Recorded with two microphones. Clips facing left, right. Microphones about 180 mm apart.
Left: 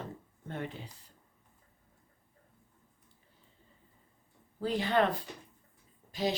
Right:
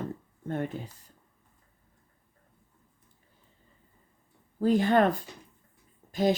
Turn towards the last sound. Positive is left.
turn(degrees=-50)  # may be behind; listen again after turning